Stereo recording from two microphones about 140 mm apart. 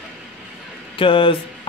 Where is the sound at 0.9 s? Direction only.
40° left (ahead or behind).